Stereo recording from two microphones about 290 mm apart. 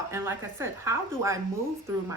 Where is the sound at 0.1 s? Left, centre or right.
Centre.